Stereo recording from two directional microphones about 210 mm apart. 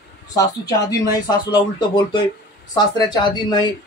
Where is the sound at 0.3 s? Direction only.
15° left (ahead or behind).